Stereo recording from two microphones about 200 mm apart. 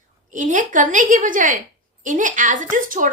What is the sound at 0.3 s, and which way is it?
A woman's voice, 40° right (ahead or behind).